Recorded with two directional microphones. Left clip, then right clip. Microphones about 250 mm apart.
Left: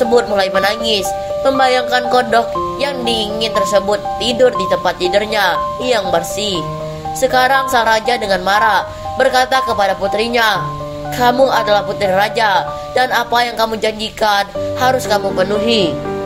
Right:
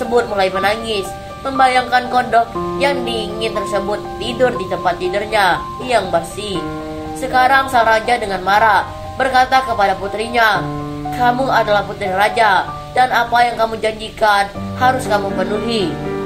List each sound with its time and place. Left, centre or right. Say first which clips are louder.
0.1 s speech: left 3 dB; left